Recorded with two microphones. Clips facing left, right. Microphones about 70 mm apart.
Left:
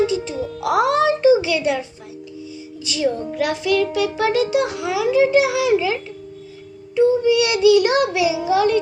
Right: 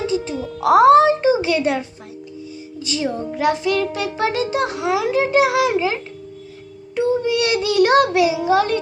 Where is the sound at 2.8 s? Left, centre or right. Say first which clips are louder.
Left 1 dB; right.